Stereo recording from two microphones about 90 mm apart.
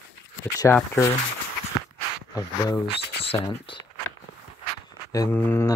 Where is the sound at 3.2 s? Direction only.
90° left.